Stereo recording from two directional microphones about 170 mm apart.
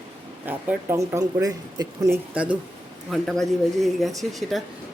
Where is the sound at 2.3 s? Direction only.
5° right (ahead or behind).